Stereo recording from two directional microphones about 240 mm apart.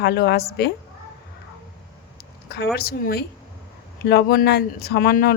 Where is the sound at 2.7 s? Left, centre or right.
Left.